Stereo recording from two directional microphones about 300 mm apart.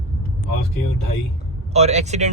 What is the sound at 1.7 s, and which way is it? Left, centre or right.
Speech, right.